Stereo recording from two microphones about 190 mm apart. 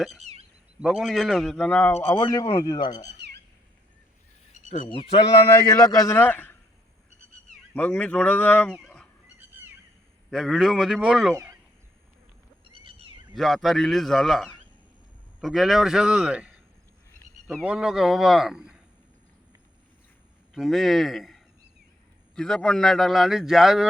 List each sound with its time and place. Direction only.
0.2 s a sound: 35° right (ahead or behind)
0.8 s a man's voice: centre (ahead or behind); by 3.2 s 20° left (ahead or behind)
4.6 s a sound: 40° right (ahead or behind)
5.6 s a man's voice: 20° left (ahead or behind)
7.7 s speech: 5° left (ahead or behind)
10.3 s speech: centre (ahead or behind)
12.6 s a sound: 30° right (ahead or behind)
13.3 s speech: centre (ahead or behind)
17.6 s speech: 5° right (ahead or behind)
20.5 s a man's voice: centre (ahead or behind)